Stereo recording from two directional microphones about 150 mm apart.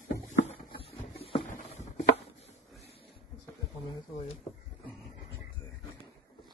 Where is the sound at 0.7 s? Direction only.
35° left (ahead or behind).